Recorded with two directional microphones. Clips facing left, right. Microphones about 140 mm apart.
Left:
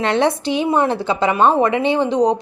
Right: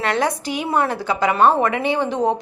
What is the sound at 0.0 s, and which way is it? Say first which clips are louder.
A woman's voice: left 4 dB; 25° left (ahead or behind).